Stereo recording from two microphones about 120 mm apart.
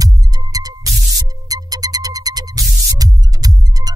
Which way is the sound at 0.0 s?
30° right (ahead or behind).